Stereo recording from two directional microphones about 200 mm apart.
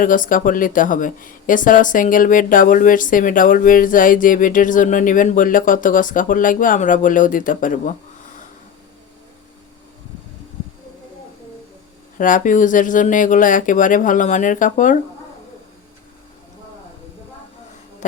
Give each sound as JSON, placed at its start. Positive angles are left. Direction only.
{"t": 0.0, "sound": "speech", "side_deg": 40}
{"t": 12.1, "sound": "speech", "side_deg": 40}